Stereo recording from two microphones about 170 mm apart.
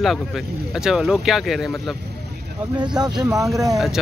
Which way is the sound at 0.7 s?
5° right (ahead or behind).